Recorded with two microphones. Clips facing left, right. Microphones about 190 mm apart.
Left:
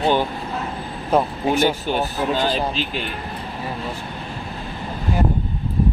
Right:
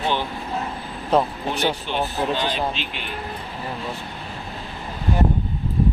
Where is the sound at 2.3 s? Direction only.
40° left (ahead or behind).